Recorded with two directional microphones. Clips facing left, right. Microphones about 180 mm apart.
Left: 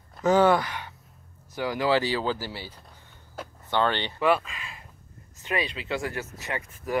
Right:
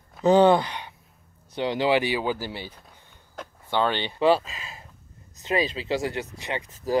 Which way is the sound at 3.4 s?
5° left (ahead or behind).